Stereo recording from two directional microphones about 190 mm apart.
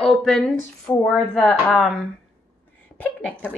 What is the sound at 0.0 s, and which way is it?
Speech, centre (ahead or behind).